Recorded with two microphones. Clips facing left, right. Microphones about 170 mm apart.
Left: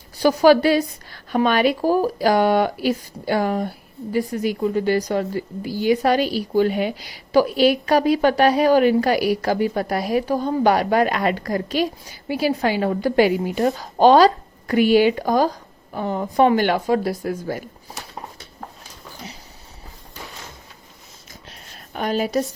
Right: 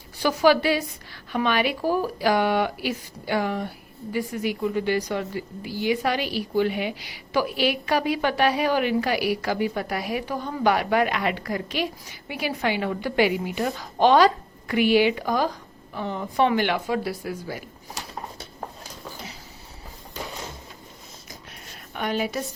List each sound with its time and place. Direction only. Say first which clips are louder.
0.2 s a woman's voice: left 5 dB; 40° left (ahead or behind)
21.9 s a woman's voice: left 5 dB; 35° left (ahead or behind)